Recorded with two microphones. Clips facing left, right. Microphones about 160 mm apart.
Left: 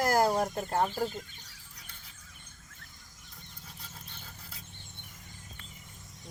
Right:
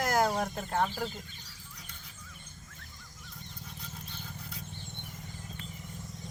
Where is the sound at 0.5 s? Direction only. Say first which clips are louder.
Left 1 dB; 10° left (ahead or behind).